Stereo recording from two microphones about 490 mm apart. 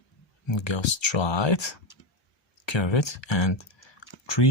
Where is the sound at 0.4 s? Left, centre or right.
Left.